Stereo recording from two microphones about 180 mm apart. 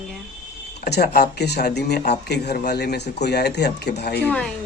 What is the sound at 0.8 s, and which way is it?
Speech, 60° left (ahead or behind).